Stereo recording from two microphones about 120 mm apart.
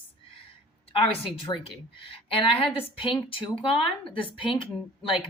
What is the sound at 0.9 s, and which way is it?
Speech, 50° left (ahead or behind).